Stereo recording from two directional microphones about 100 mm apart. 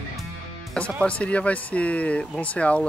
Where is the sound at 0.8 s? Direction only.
10° left (ahead or behind).